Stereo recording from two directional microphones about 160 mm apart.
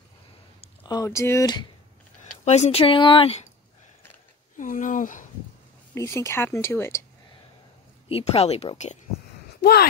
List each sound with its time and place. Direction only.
0.8 s speech: 20° left (ahead or behind)
2.4 s speech: 45° left (ahead or behind)
4.6 s speech: 55° left (ahead or behind)
5.9 s speech: 15° left (ahead or behind)
8.1 s speech: 40° left (ahead or behind)
9.6 s speech: 80° left